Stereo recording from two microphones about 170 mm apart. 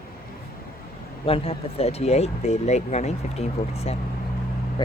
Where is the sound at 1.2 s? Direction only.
35° left (ahead or behind).